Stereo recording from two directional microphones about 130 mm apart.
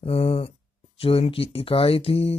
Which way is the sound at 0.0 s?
50° left (ahead or behind).